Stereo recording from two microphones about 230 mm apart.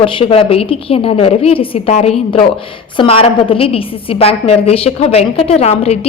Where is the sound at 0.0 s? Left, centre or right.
Left.